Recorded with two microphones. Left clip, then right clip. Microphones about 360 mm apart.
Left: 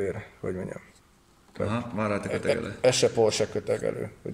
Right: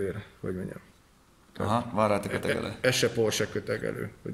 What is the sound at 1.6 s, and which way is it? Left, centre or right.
Speech, centre.